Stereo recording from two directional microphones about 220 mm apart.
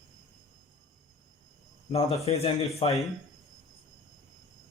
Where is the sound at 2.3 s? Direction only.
25° left (ahead or behind).